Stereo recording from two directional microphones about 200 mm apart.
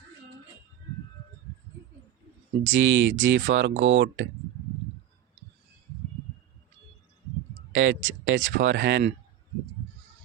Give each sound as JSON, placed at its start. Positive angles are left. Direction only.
{"t": 2.6, "sound": "speech", "side_deg": -70}
{"t": 7.7, "sound": "speech", "side_deg": -65}